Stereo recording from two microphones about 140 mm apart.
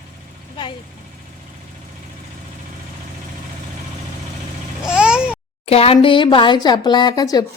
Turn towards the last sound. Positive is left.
turn(degrees=25)  # may be behind; listen again after turning